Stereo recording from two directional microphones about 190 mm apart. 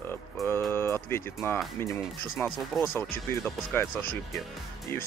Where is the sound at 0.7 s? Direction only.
15° left (ahead or behind).